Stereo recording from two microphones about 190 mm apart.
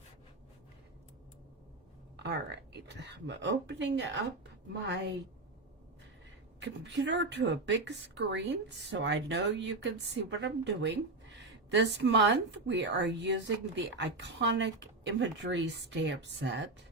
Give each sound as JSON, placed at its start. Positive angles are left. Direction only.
{"t": 2.1, "sound": "a woman's voice", "side_deg": -65}
{"t": 6.6, "sound": "a woman's voice", "side_deg": -65}